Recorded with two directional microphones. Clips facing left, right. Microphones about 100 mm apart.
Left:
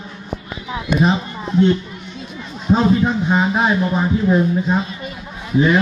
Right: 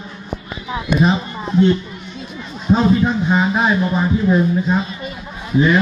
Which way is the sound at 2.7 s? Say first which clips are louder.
Even; 15° left (ahead or behind).